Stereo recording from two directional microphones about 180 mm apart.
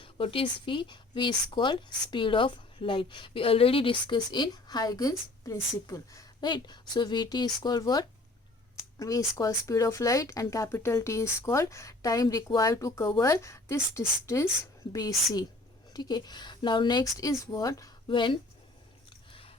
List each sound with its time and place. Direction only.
0.0 s speech: 30° left (ahead or behind)
19.3 s chewing: 30° left (ahead or behind)